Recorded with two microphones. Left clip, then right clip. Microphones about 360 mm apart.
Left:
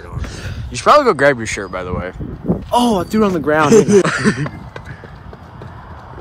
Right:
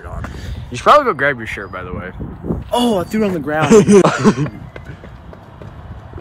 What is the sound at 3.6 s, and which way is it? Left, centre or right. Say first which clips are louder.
Speech: right 2 dB; right.